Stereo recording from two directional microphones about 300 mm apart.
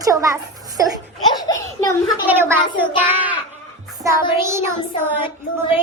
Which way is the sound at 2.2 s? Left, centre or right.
Centre.